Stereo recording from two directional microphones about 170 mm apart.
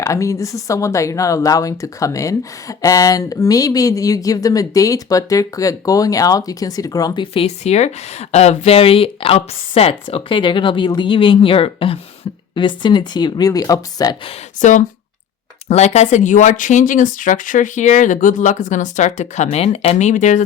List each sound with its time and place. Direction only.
0.0 s speech: 20° left (ahead or behind)
14.3 s speech: 45° left (ahead or behind)